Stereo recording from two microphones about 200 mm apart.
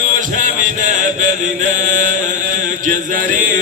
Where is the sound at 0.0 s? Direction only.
40° right (ahead or behind).